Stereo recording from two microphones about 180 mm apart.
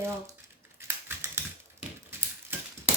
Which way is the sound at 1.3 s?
15° right (ahead or behind).